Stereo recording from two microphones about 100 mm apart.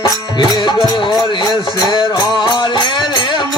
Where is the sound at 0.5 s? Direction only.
50° left (ahead or behind).